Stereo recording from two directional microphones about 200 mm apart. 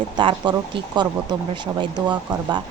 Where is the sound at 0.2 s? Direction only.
25° right (ahead or behind).